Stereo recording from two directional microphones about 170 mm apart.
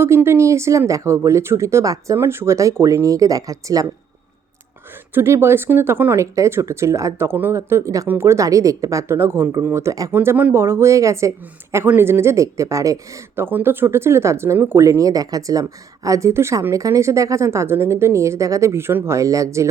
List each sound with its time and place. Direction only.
0.0 s speech: 15° right (ahead or behind)
5.1 s speech: 15° right (ahead or behind)